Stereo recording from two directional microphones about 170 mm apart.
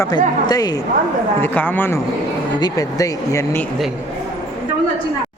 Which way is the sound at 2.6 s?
20° left (ahead or behind).